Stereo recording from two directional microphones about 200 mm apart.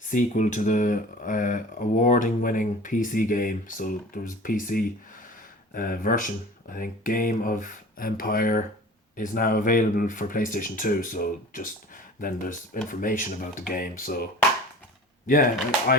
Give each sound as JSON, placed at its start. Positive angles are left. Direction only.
{"t": 0.1, "sound": "speech", "side_deg": 40}
{"t": 15.3, "sound": "speech", "side_deg": 40}